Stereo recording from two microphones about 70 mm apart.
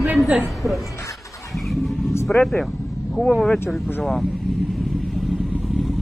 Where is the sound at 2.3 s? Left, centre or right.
Centre.